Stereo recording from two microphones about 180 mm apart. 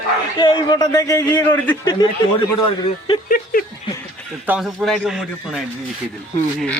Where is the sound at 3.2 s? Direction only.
55° left (ahead or behind).